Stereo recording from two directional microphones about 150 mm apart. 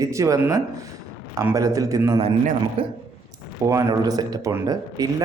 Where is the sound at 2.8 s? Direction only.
40° right (ahead or behind).